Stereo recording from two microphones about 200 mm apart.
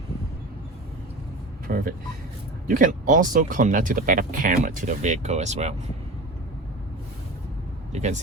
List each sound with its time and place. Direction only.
1.6 s speech: 45° right (ahead or behind)
7.9 s speech: 35° right (ahead or behind)